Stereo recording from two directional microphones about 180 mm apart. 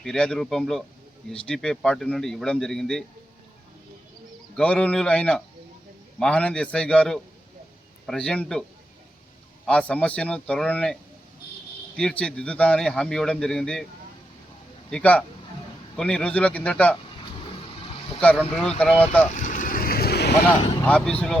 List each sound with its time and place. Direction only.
0.0 s a man's voice: 5° left (ahead or behind)
4.5 s a man's voice: 5° left (ahead or behind)
9.6 s speech: 5° left (ahead or behind)
11.9 s a man's voice: 5° left (ahead or behind)
14.8 s a man's voice: 5° left (ahead or behind)
18.8 s speech: 5° left (ahead or behind)
19.3 s vehicle: 45° left (ahead or behind); by 20.3 s 65° left (ahead or behind)
20.8 s a man's voice: 5° left (ahead or behind)